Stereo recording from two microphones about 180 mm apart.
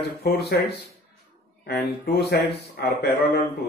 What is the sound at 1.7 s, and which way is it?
Speech, 65° left (ahead or behind).